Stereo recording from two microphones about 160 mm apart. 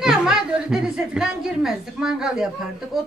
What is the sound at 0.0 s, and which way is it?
Speech, 5° right (ahead or behind).